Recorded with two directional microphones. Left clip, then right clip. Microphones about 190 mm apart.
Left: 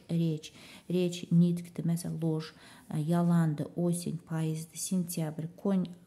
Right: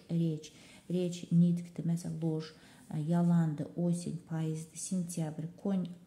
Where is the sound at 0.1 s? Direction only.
20° left (ahead or behind).